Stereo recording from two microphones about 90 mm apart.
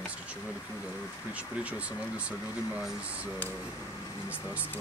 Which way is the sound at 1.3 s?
15° right (ahead or behind).